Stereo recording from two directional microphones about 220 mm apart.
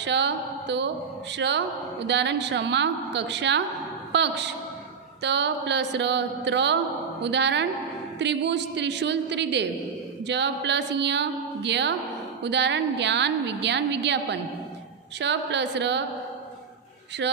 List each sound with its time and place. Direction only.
0.0 s speech: 50° right (ahead or behind)
17.2 s speech: 55° right (ahead or behind)